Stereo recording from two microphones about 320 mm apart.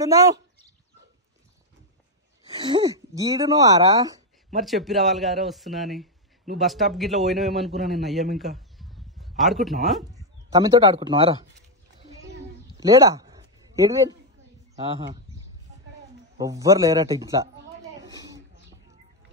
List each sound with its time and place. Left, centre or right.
0.0 s speech: centre
2.5 s speech: centre
4.6 s a man's voice: centre
8.4 s a sound: centre
9.4 s a man's voice: centre
10.1 s speech: centre
12.7 s a sound: centre
14.8 s speech: centre
16.3 s speech: centre
18.0 s a sound: centre